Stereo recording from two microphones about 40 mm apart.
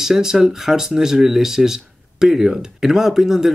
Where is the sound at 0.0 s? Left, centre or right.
Centre.